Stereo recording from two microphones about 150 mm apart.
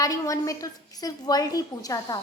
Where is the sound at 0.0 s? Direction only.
20° left (ahead or behind).